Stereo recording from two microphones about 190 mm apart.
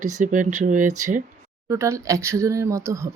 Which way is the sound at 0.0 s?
40° right (ahead or behind).